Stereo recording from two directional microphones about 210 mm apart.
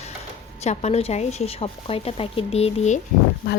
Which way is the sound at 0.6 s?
30° left (ahead or behind).